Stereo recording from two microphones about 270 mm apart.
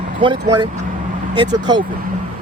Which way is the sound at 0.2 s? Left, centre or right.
Centre.